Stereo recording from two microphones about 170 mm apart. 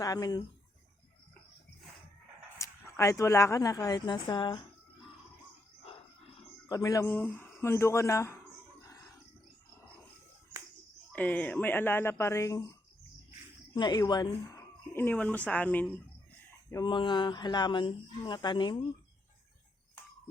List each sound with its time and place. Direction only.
0.0 s speech: 20° left (ahead or behind)
2.6 s a woman's voice: 20° left (ahead or behind)
6.7 s speech: 20° left (ahead or behind)
11.1 s speech: 10° left (ahead or behind)
13.7 s speech: 25° left (ahead or behind)
14.9 s speech: 10° left (ahead or behind)
16.7 s speech: 30° left (ahead or behind)